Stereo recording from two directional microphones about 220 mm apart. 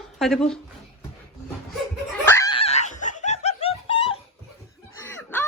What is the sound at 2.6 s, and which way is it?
Snicker, 30° left (ahead or behind).